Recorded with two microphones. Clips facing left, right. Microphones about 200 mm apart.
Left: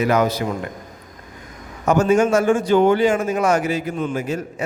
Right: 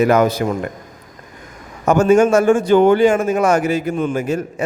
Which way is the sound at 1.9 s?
50° right (ahead or behind).